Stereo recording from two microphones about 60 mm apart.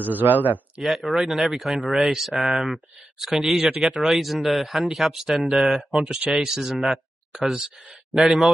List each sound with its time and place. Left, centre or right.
0.0 s speech: right
0.7 s speech: centre